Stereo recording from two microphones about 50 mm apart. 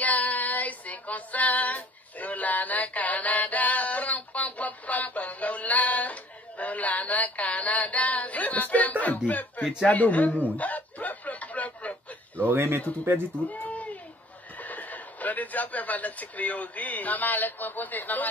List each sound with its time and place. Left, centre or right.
0.0 s female singing: left
6.6 s synthetic singing: left
9.0 s speech: left
9.8 s synthetic singing: left
10.6 s snicker: left
12.5 s speech: right
13.5 s baby cry: left
14.6 s speech: left